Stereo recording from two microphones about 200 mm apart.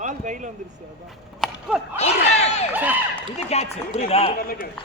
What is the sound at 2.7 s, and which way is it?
Speech, 10° right (ahead or behind).